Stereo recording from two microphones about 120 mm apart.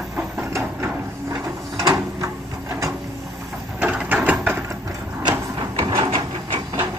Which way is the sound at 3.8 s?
10° right (ahead or behind).